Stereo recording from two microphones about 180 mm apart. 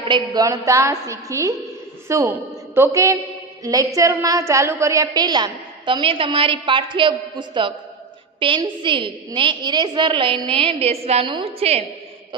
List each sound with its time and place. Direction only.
0.1 s a woman's voice: 20° right (ahead or behind)